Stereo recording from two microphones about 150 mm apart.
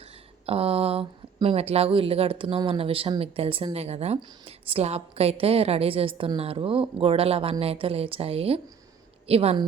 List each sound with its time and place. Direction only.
0.4 s a woman's voice: 40° right (ahead or behind)